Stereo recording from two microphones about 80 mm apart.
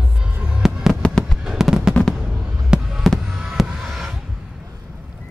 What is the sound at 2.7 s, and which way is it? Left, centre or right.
Fireworks, centre.